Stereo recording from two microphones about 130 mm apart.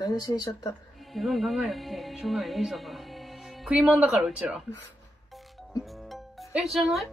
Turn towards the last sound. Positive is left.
turn(degrees=0)  # may be behind; listen again after turning